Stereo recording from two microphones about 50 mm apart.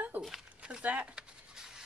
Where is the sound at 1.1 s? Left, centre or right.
Centre.